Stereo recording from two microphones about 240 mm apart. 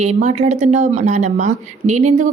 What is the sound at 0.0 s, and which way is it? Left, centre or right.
A woman's voice, right.